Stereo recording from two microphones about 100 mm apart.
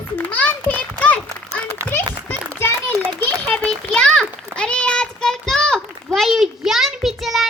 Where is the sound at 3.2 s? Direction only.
10° left (ahead or behind).